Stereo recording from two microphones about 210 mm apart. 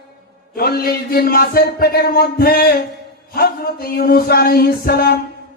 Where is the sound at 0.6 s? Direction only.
50° left (ahead or behind).